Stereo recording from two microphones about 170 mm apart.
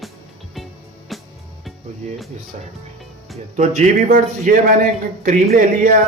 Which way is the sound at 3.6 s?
50° right (ahead or behind).